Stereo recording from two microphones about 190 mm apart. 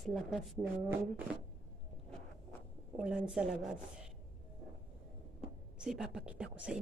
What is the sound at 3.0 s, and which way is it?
Speech, 5° right (ahead or behind).